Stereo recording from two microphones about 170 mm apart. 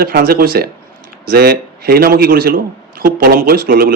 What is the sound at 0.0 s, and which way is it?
Speech, 60° right (ahead or behind).